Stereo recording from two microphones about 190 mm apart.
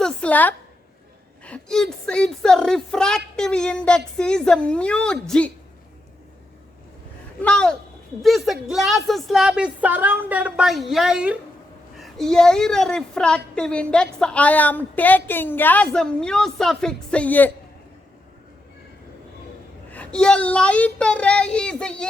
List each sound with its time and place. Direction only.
0.0 s a sound: 5° left (ahead or behind)
1.5 s a woman's voice: 5° left (ahead or behind)
7.4 s a woman's voice: 5° left (ahead or behind)
19.9 s a woman's voice: 5° left (ahead or behind)